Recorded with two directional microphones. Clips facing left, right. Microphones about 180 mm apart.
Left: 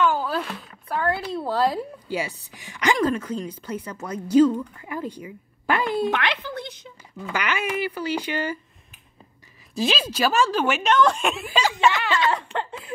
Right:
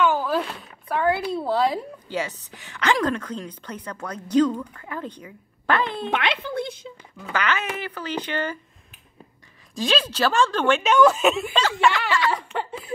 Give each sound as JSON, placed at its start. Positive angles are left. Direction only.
{"t": 0.0, "sound": "speech", "side_deg": 0}
{"t": 6.0, "sound": "speech", "side_deg": -25}
{"t": 7.3, "sound": "speech", "side_deg": 10}
{"t": 9.8, "sound": "speech", "side_deg": 5}
{"t": 10.8, "sound": "speech", "side_deg": -5}
{"t": 11.6, "sound": "speech", "side_deg": 20}
{"t": 12.3, "sound": "speech", "side_deg": -10}